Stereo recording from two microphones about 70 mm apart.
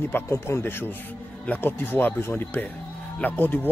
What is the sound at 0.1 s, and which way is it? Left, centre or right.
A man's voice, left.